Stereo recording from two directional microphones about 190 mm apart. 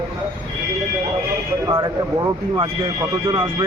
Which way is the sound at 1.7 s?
20° right (ahead or behind).